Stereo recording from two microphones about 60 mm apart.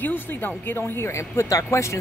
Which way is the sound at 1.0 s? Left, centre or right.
Left.